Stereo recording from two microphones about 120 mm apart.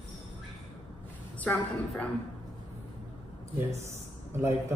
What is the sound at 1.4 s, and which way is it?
Speech, 10° left (ahead or behind).